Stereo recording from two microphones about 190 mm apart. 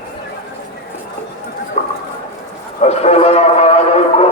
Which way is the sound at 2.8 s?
35° left (ahead or behind).